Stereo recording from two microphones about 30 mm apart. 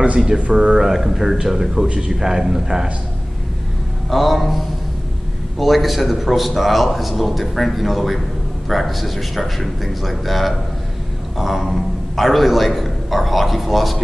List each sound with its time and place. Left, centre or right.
0.5 s speech: right
0.7 s a man's voice: centre
4.1 s a man's voice: centre